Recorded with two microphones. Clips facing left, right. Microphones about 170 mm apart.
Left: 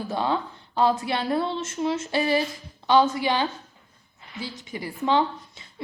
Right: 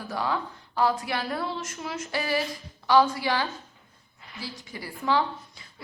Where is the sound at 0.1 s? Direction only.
25° left (ahead or behind).